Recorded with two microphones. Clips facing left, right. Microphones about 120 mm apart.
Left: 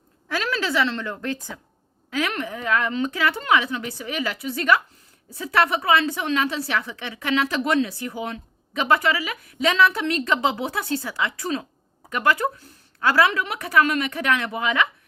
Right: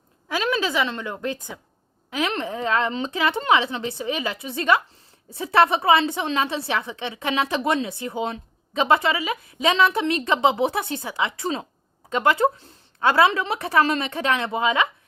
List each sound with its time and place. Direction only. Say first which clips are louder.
0.3 s a woman's voice: right 2 dB; 20° right (ahead or behind)